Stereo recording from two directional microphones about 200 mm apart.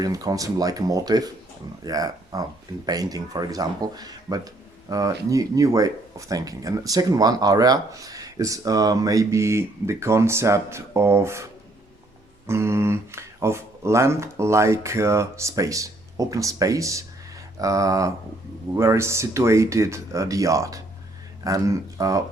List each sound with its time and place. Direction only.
0.0 s speech: 20° right (ahead or behind)
12.5 s speech: 15° right (ahead or behind)